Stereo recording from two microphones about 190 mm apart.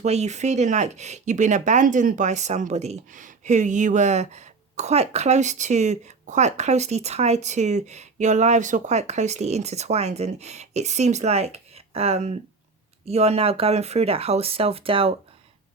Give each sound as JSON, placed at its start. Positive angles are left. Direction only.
{"t": 0.0, "sound": "speech", "side_deg": -35}